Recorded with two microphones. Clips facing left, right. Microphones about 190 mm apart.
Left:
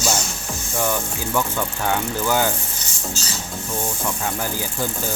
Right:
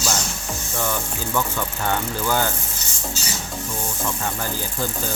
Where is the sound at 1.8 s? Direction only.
10° left (ahead or behind).